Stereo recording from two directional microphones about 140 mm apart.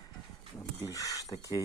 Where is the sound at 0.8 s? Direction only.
25° left (ahead or behind).